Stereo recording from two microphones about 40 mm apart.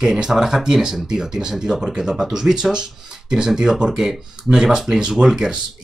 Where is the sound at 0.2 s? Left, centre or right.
Centre.